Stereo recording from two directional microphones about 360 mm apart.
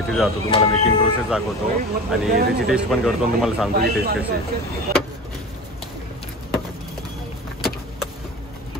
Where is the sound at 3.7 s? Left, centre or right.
Right.